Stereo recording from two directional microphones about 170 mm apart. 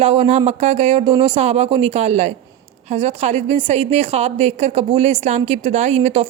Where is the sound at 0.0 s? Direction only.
35° right (ahead or behind).